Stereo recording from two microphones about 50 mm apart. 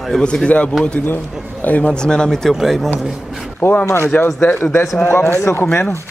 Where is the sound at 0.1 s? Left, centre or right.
Centre; by 2.0 s left.